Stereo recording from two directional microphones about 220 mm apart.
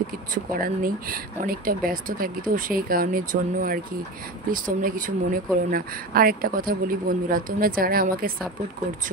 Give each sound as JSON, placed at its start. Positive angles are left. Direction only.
{"t": 0.3, "sound": "speech", "side_deg": -40}